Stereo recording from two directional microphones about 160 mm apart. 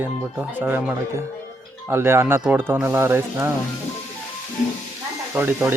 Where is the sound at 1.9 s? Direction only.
15° right (ahead or behind).